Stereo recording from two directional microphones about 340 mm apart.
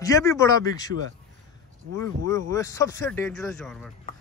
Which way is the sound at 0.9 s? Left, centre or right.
Right.